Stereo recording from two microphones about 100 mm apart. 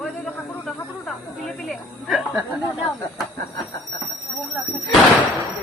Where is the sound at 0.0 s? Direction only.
5° left (ahead or behind).